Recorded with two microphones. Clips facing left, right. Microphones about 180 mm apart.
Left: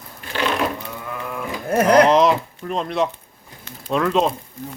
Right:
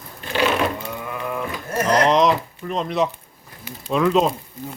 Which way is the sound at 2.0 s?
Centre (ahead or behind).